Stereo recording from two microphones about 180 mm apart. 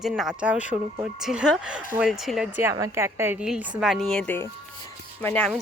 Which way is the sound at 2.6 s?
15° right (ahead or behind).